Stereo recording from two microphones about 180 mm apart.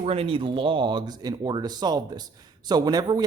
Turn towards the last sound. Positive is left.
turn(degrees=-20)  # may be behind; listen again after turning